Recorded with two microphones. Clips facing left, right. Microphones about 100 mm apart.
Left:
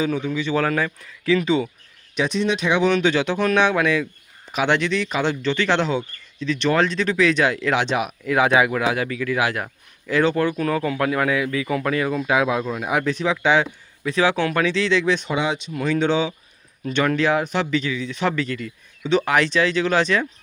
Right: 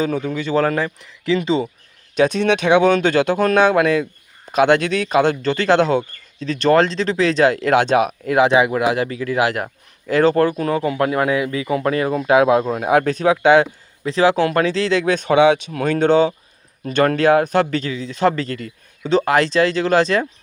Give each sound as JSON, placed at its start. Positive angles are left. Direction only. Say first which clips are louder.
{"t": 0.0, "sound": "a man's voice", "louder": "right 2 dB", "side_deg": -45}
{"t": 2.2, "sound": "speech", "louder": "right 5 dB", "side_deg": -55}
{"t": 10.6, "sound": "a man's voice", "louder": "right 3 dB", "side_deg": -30}
{"t": 14.0, "sound": "speech", "louder": "right 4 dB", "side_deg": -35}
{"t": 15.3, "sound": "speech", "louder": "right 10 dB", "side_deg": -65}